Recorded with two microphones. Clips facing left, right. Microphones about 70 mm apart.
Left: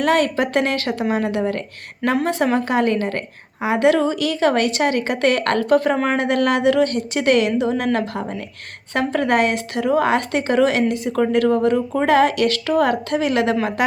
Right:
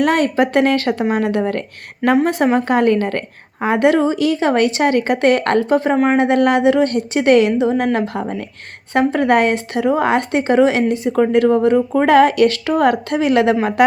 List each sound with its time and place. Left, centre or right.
0.0 s a woman's voice: right
3.8 s speech: right
6.0 s speech: centre
6.2 s a woman's voice: right
11.9 s a woman's voice: right